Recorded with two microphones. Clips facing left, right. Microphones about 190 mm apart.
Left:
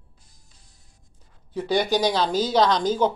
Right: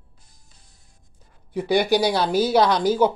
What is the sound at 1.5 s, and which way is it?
Speech, 10° right (ahead or behind).